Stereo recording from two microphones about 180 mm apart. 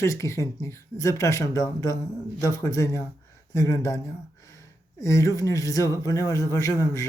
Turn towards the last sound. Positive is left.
turn(degrees=15)  # may be behind; listen again after turning